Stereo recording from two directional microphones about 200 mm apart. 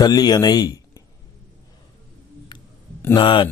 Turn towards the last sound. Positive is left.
turn(degrees=25)  # may be behind; listen again after turning